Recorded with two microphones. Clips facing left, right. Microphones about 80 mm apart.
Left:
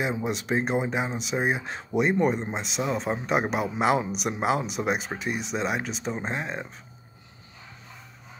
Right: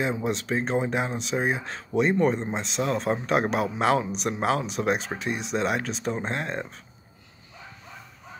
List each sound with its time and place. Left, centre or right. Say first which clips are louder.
0.0 s speech: right 1 dB; centre
0.5 s speech: left 4 dB; centre
0.7 s speech: right 1 dB; centre